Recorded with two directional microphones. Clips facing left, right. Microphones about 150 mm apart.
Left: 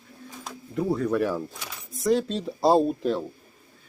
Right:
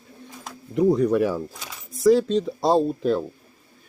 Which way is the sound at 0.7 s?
15° right (ahead or behind).